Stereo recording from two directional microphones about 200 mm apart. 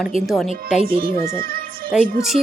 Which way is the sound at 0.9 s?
45° right (ahead or behind).